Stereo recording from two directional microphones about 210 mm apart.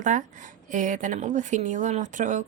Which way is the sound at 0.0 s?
35° right (ahead or behind).